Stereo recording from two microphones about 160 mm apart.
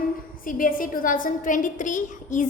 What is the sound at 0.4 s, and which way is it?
A woman's voice, 60° left (ahead or behind).